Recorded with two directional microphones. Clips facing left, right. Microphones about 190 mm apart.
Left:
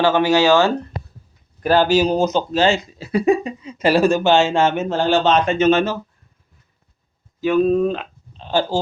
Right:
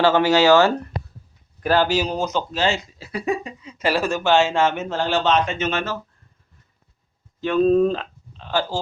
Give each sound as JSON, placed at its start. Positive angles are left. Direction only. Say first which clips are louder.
{"t": 0.0, "sound": "speech", "louder": "left 1 dB", "side_deg": 15}
{"t": 1.6, "sound": "speech", "louder": "left 4 dB", "side_deg": 30}
{"t": 7.4, "sound": "speech", "louder": "left 1 dB", "side_deg": 5}
{"t": 8.4, "sound": "speech", "louder": "left 4 dB", "side_deg": 25}